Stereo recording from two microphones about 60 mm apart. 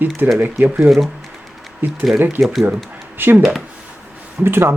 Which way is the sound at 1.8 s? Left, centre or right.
Right.